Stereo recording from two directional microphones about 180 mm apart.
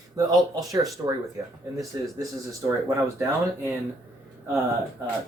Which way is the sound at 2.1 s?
15° right (ahead or behind).